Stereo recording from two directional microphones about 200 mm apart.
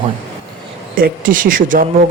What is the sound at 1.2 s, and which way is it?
Speech, 45° right (ahead or behind).